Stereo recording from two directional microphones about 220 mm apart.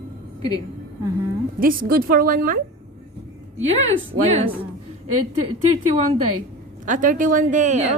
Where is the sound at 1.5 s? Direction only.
40° right (ahead or behind).